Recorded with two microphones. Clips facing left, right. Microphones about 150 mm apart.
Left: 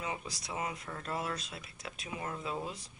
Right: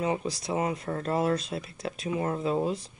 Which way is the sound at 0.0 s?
40° right (ahead or behind).